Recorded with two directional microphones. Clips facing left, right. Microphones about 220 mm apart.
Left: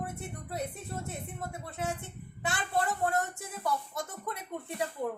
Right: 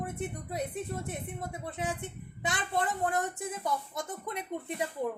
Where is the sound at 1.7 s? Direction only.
20° right (ahead or behind).